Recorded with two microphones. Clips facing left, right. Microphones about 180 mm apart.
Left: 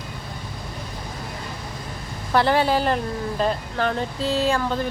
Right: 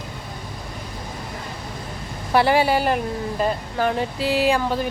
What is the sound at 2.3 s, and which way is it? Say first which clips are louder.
Speech: right 1 dB; 10° right (ahead or behind).